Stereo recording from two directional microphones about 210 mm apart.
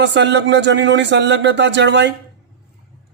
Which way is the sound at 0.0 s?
55° right (ahead or behind).